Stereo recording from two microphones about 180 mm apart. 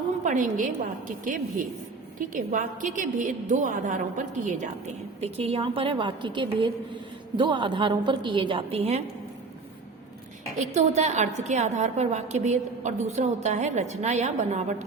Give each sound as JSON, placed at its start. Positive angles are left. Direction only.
{"t": 0.3, "sound": "a woman's voice", "side_deg": -45}
{"t": 10.6, "sound": "a woman's voice", "side_deg": -40}